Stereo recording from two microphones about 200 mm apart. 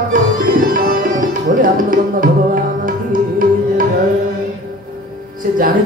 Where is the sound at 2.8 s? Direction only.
45° right (ahead or behind).